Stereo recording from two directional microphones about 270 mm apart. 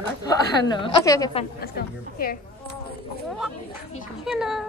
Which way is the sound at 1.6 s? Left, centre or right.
Left.